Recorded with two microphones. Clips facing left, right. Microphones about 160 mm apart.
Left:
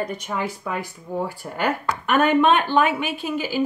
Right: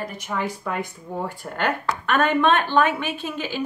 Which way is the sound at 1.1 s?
5° left (ahead or behind).